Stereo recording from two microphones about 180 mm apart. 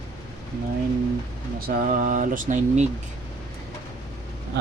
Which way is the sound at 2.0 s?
45° right (ahead or behind).